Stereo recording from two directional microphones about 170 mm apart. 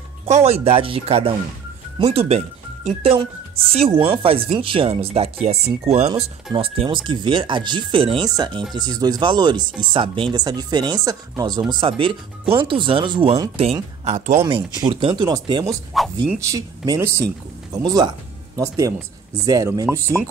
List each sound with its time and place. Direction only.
0.2 s speech: 40° right (ahead or behind)
14.5 s speech: 30° right (ahead or behind)
15.9 s speech: centre (ahead or behind)
16.3 s speech: 20° right (ahead or behind)